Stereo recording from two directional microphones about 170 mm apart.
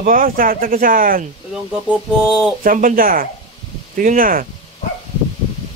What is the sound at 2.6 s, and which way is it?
Speech, 55° right (ahead or behind).